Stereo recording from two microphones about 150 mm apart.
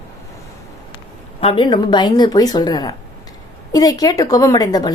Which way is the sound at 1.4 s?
35° left (ahead or behind).